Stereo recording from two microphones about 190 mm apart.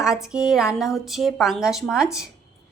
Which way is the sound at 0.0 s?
5° right (ahead or behind).